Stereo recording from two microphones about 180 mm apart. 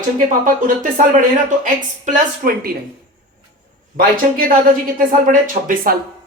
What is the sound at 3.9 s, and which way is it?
Speech, 50° right (ahead or behind).